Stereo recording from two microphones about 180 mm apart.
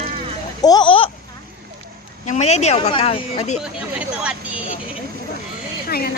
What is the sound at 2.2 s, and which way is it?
Speech, 40° left (ahead or behind).